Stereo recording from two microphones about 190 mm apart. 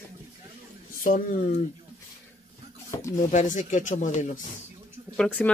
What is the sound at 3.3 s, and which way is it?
Speech, 40° left (ahead or behind).